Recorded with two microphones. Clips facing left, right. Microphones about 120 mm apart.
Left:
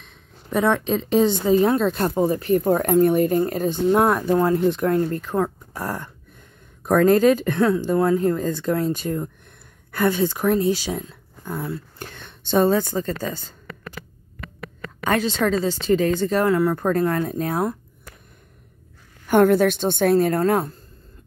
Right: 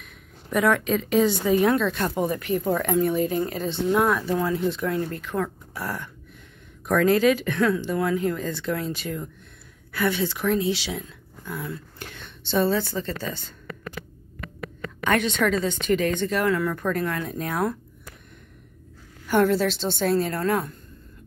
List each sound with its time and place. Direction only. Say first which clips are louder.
0.0 s a sound: right 1 dB; 30° left (ahead or behind)
1.4 s a woman's voice: left 3 dB; 30° left (ahead or behind)
2.5 s speech: left 6 dB; 45° left (ahead or behind)
7.5 s a woman's voice: left 4 dB; 30° left (ahead or behind)
12.3 s speech: left 4 dB; 50° left (ahead or behind)
15.0 s a woman's voice: left 2 dB; 30° left (ahead or behind)
16.4 s a woman's voice: left 4 dB; 25° left (ahead or behind)
19.2 s speech: left 5 dB; 50° left (ahead or behind)